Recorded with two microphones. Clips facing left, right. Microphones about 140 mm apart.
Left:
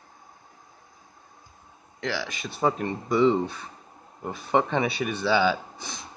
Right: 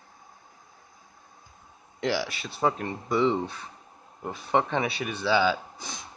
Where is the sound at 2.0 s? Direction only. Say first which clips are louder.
Right 3 dB; 15° right (ahead or behind).